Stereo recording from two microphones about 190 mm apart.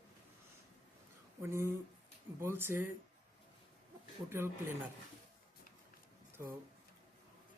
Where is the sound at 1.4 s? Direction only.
15° right (ahead or behind).